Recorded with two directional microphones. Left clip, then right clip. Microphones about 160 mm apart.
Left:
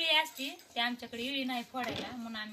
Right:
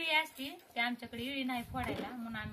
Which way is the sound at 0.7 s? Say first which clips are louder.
Left 2 dB; 30° left (ahead or behind).